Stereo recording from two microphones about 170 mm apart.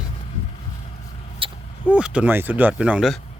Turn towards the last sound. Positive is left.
turn(degrees=-5)  # may be behind; listen again after turning